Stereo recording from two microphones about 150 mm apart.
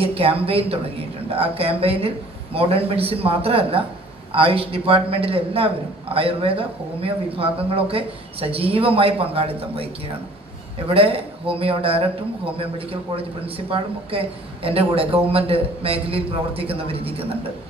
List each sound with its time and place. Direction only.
0.0 s a woman's voice: 40° right (ahead or behind)
10.9 s a woman's voice: 40° right (ahead or behind)